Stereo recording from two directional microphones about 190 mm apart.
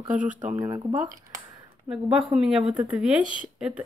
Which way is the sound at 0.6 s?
20° right (ahead or behind).